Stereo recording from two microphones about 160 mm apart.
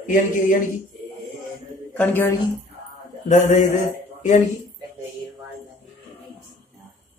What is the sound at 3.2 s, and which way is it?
A man's voice, 50° left (ahead or behind).